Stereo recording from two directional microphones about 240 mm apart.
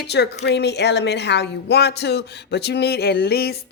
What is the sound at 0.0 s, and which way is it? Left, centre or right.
Speech, left.